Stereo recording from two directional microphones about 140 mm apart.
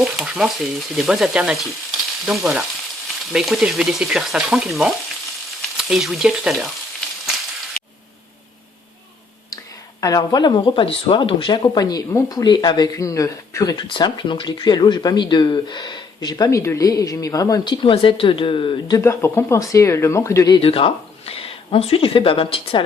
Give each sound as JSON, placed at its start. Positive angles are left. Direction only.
{"t": 0.0, "sound": "frying", "side_deg": -5}
{"t": 7.8, "sound": "a sound", "side_deg": 5}
{"t": 10.0, "sound": "speech", "side_deg": 30}
{"t": 20.6, "sound": "speech", "side_deg": 40}